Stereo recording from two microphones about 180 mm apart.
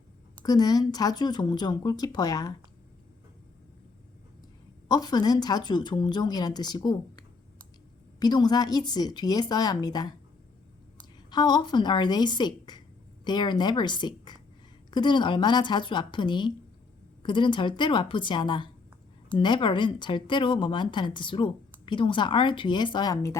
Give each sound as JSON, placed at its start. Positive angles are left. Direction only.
{"t": 0.4, "sound": "a woman's voice", "side_deg": 20}
{"t": 4.9, "sound": "a woman's voice", "side_deg": 20}
{"t": 11.3, "sound": "a woman's voice", "side_deg": 25}